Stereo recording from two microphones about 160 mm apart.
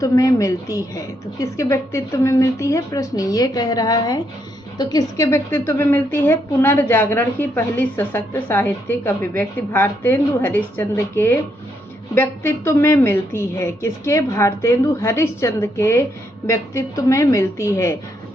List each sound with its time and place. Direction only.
0.0 s a woman's voice: 20° left (ahead or behind)